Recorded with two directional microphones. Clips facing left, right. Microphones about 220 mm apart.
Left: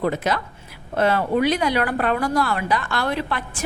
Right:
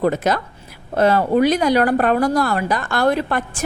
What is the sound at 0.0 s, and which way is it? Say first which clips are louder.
A woman's voice: right 4 dB; 45° right (ahead or behind).